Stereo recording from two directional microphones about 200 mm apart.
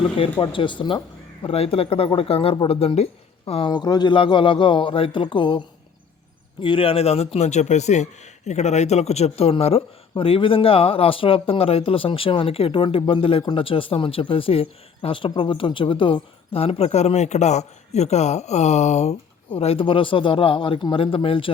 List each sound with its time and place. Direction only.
0.2 s a man's voice: 20° left (ahead or behind)